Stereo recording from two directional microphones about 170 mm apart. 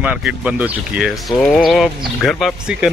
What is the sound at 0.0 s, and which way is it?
A man's voice, 5° right (ahead or behind).